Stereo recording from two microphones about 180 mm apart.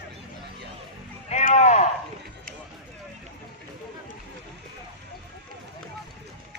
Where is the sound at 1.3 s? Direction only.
40° left (ahead or behind).